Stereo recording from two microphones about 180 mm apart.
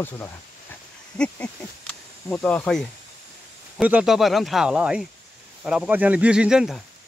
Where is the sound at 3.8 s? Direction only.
5° right (ahead or behind).